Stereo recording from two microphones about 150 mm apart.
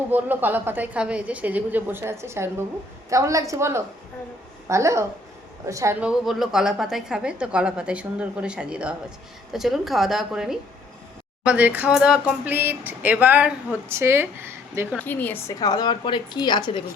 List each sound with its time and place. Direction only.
0.1 s speech: 10° right (ahead or behind)
6.0 s a woman's voice: 5° right (ahead or behind)
14.9 s a woman's voice: 10° left (ahead or behind)
15.6 s a woman's voice: 25° left (ahead or behind)